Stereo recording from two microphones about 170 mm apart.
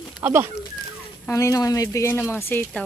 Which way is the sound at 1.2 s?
20° left (ahead or behind).